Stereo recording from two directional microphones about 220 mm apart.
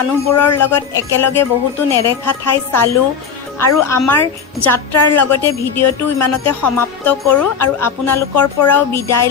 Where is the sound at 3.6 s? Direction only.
10° left (ahead or behind).